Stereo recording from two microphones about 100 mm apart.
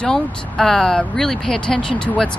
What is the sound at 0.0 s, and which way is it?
Speech, 5° left (ahead or behind).